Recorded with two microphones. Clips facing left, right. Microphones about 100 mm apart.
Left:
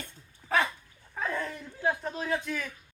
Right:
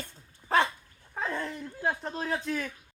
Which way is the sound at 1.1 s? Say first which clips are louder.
Even; 25° right (ahead or behind).